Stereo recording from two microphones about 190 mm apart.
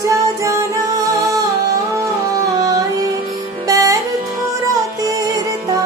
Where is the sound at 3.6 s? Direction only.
20° right (ahead or behind).